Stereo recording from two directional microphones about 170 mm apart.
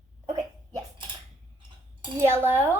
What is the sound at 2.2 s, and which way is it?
Speech, 15° right (ahead or behind).